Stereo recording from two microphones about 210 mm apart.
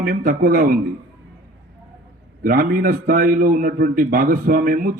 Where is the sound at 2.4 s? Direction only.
40° right (ahead or behind).